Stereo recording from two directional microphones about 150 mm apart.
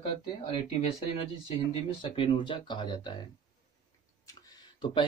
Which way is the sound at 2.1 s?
35° left (ahead or behind).